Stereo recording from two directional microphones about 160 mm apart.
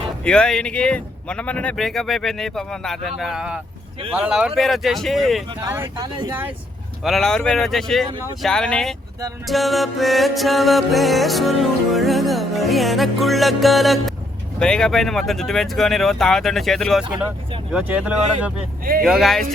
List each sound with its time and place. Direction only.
0.3 s speech: 5° left (ahead or behind)
6.0 s speech: 25° right (ahead or behind)
7.0 s speech: centre (ahead or behind)